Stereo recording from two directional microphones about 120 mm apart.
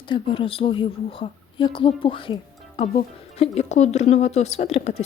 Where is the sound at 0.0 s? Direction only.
45° left (ahead or behind).